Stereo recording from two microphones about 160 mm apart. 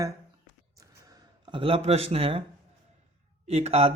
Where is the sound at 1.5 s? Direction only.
30° right (ahead or behind).